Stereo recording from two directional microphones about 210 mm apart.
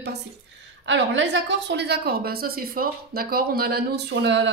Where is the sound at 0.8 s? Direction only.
60° right (ahead or behind).